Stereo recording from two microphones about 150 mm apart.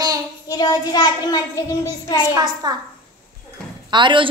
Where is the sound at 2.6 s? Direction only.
25° right (ahead or behind).